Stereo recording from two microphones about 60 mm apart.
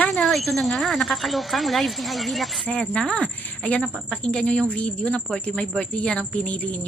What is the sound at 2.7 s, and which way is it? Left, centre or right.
Speech, centre.